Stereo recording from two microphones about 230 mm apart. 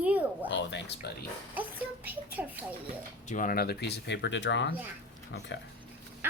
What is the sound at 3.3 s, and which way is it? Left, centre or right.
Speech, left.